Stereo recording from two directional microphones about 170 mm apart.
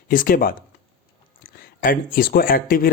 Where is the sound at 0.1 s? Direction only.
55° left (ahead or behind).